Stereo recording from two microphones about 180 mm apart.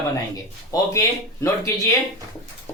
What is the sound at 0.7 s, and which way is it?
Speech, 15° left (ahead or behind).